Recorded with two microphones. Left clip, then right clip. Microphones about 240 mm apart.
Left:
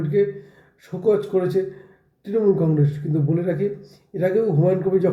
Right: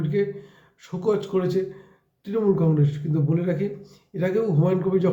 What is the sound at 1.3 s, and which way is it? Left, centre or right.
A man's voice, centre.